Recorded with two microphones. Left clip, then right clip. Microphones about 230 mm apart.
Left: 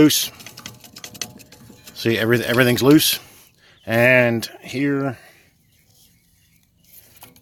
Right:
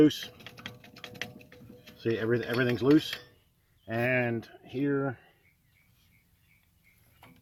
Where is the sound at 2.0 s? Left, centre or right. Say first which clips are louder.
Left 10 dB; left.